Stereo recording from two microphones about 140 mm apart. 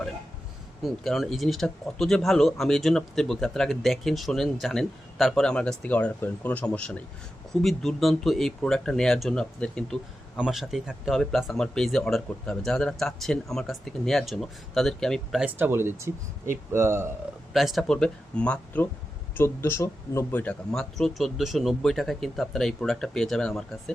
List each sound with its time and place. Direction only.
0.8 s speech: centre (ahead or behind)
15.4 s speech: 10° right (ahead or behind)
17.5 s speech: centre (ahead or behind)